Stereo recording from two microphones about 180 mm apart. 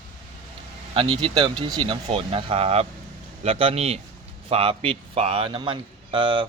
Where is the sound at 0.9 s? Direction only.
30° right (ahead or behind).